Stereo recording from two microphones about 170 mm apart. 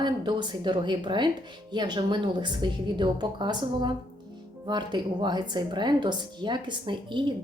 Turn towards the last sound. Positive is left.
turn(degrees=-30)  # may be behind; listen again after turning